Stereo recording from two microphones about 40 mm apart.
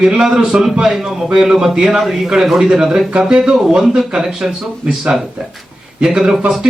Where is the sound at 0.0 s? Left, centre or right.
Centre.